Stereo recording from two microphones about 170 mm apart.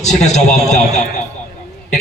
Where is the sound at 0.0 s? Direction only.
45° left (ahead or behind).